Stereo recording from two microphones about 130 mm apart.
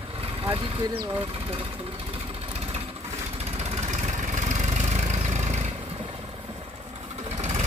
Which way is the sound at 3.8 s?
65° right (ahead or behind).